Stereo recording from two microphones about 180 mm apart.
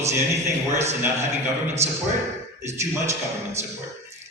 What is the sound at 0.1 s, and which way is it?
Speech, 15° right (ahead or behind).